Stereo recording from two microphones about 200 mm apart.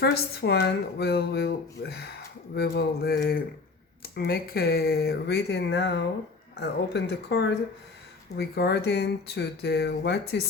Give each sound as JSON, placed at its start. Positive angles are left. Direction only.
{"t": 0.0, "sound": "speech", "side_deg": 50}